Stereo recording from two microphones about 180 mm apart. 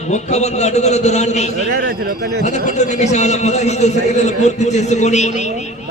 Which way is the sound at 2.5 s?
40° left (ahead or behind).